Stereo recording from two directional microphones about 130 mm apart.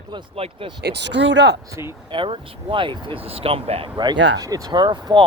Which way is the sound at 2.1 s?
40° right (ahead or behind).